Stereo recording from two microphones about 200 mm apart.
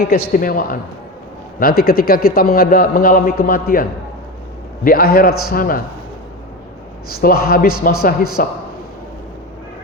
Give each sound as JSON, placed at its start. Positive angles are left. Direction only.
{"t": 0.0, "sound": "a man's voice", "side_deg": 45}
{"t": 7.1, "sound": "a man's voice", "side_deg": 50}